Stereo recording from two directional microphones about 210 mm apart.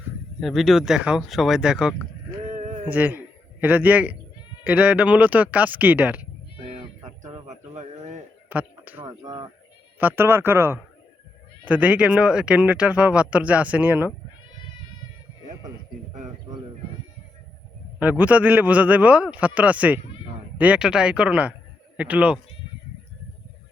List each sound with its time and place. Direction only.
0.3 s speech: centre (ahead or behind)
2.6 s a sound: 35° right (ahead or behind)
2.8 s speech: 10° right (ahead or behind)
7.3 s a sound: 30° right (ahead or behind)
8.4 s speech: 10° right (ahead or behind)
9.0 s speech: 20° right (ahead or behind)
18.0 s speech: 5° right (ahead or behind)